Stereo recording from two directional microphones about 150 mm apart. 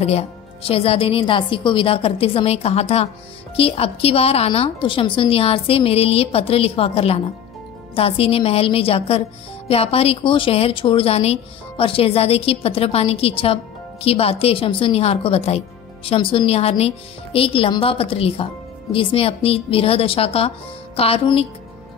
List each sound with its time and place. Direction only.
0.0 s speech: 45° left (ahead or behind)